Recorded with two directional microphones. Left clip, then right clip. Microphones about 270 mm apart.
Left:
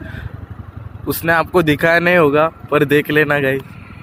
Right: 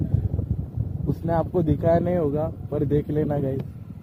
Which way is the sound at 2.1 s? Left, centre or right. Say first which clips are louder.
Left 12 dB; left.